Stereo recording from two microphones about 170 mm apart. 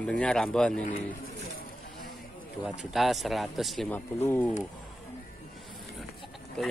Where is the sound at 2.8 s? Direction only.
Centre (ahead or behind).